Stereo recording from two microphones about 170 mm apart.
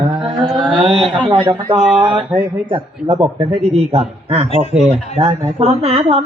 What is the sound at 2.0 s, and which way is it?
Mantra, 30° right (ahead or behind).